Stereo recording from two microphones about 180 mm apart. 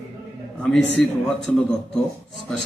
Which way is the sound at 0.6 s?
5° left (ahead or behind).